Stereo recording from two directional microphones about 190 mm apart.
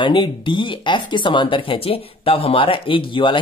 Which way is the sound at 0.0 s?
25° left (ahead or behind).